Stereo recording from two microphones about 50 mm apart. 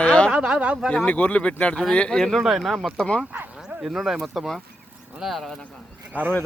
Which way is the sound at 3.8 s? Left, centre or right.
Centre.